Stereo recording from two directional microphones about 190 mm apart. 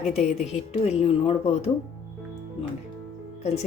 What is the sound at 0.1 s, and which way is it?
A woman's voice, 35° left (ahead or behind).